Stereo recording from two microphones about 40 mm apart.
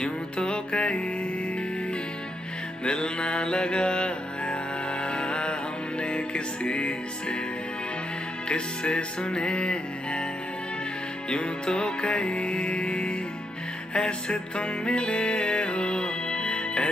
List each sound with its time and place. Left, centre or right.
0.0 s music: left
2.8 s music: left
8.5 s music: left
11.2 s music: left